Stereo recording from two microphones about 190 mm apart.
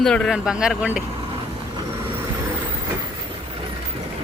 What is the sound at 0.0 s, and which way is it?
Speech, 5° left (ahead or behind).